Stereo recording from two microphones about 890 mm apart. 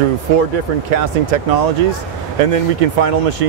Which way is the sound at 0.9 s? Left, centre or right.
Right.